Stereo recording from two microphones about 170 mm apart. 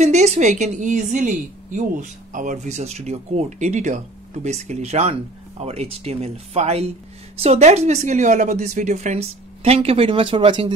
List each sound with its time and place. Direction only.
0.0 s a woman's voice: 40° right (ahead or behind)